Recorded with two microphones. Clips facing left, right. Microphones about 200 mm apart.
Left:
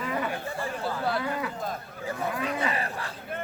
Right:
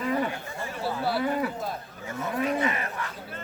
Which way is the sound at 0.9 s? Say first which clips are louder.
Right 2 dB; 5° right (ahead or behind).